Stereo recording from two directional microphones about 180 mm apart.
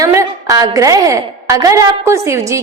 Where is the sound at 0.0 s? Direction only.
15° right (ahead or behind).